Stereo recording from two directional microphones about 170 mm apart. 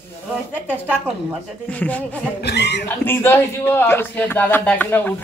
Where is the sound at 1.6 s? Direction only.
10° left (ahead or behind).